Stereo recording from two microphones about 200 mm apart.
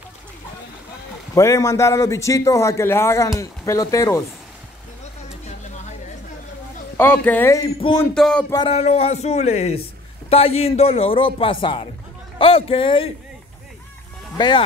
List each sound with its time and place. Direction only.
1.3 s a man's voice: 15° left (ahead or behind)
5.3 s a sound: 35° left (ahead or behind)
7.0 s a man's voice: 10° left (ahead or behind)
8.0 s speech: 5° left (ahead or behind)
8.6 s a man's voice: 30° left (ahead or behind)
14.3 s speech: 20° left (ahead or behind)